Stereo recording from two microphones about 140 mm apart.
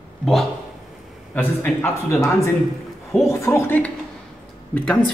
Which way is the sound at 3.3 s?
20° left (ahead or behind).